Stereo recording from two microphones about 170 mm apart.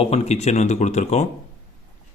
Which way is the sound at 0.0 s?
40° left (ahead or behind).